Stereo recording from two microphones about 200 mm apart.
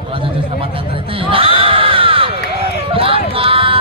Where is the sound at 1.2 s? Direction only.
25° right (ahead or behind).